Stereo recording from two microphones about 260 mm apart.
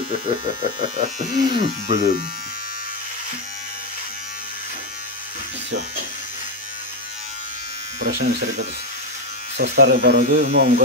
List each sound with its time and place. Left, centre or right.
0.7 s speech: right
8.0 s speech: right